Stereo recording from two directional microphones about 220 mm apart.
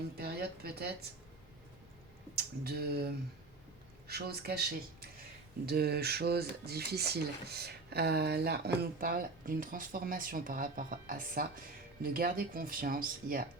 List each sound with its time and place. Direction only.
0.2 s speech: 45° right (ahead or behind)
2.3 s speech: 45° right (ahead or behind)
4.1 s speech: 45° right (ahead or behind)